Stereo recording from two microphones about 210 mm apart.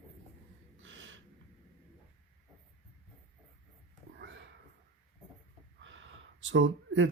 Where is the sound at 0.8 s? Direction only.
65° right (ahead or behind).